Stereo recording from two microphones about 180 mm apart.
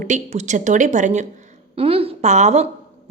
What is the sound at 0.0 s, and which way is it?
A woman's voice, 40° right (ahead or behind).